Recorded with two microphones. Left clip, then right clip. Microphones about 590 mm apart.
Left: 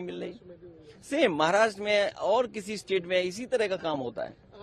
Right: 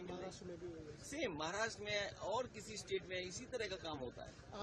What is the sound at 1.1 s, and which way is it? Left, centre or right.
A man's voice, left.